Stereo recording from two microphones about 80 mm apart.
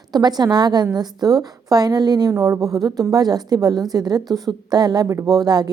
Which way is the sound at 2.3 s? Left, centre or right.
Right.